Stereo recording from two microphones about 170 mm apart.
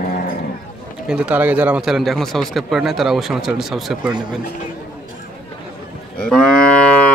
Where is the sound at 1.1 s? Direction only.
10° right (ahead or behind).